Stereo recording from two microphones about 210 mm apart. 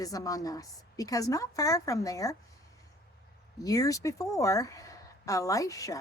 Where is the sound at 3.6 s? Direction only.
15° left (ahead or behind).